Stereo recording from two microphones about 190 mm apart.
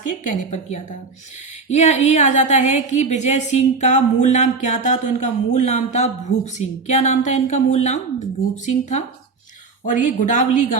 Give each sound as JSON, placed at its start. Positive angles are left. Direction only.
{"t": 0.3, "sound": "a woman's voice", "side_deg": 35}